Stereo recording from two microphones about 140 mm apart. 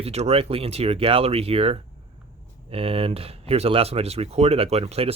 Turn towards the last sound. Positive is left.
turn(degrees=-45)  # may be behind; listen again after turning